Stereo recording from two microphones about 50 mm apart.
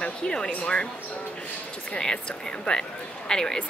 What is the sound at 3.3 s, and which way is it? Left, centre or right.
Speech, centre.